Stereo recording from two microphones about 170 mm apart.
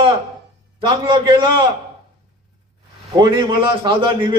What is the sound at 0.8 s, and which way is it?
Speech, 30° right (ahead or behind).